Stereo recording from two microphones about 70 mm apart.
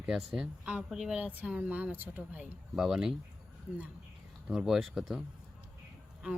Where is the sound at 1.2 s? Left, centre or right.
Right.